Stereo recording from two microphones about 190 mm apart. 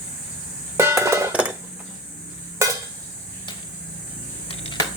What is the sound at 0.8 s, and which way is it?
Music, 15° right (ahead or behind).